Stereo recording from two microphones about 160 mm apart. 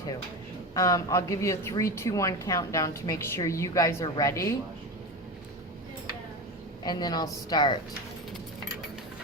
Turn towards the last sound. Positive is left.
turn(degrees=30)  # may be behind; listen again after turning